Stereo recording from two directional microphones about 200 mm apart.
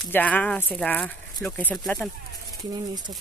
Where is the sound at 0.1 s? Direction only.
5° left (ahead or behind).